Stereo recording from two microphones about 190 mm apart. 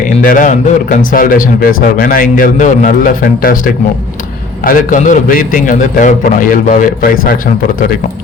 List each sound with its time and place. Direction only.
0.0 s a man's voice: 45° left (ahead or behind)
4.6 s a man's voice: 45° left (ahead or behind)